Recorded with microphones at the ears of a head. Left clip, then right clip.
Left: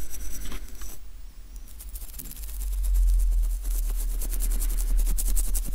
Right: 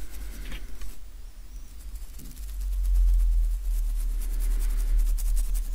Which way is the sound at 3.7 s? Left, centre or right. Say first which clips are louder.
Left 7 dB; left.